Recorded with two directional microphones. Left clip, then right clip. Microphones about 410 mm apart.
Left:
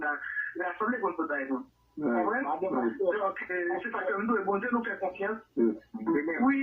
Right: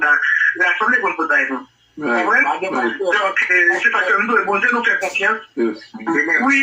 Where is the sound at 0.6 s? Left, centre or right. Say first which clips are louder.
Right 15 dB; left.